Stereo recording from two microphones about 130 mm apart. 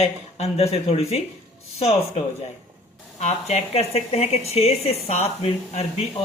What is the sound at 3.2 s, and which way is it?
Speech, 55° left (ahead or behind).